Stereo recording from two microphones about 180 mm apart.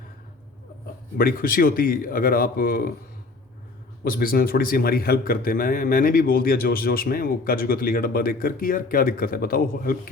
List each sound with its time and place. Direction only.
1.2 s speech: 55° left (ahead or behind)
4.0 s a man's voice: 55° left (ahead or behind)